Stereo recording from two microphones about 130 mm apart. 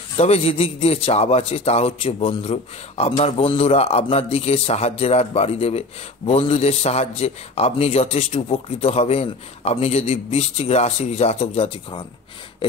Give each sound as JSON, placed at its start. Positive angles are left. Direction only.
{"t": 0.2, "sound": "a man's voice", "side_deg": 50}